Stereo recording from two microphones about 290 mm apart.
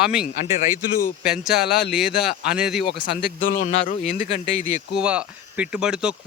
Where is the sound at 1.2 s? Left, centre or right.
Centre.